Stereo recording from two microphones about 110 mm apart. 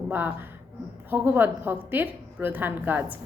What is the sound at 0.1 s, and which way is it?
A woman's voice, 15° right (ahead or behind).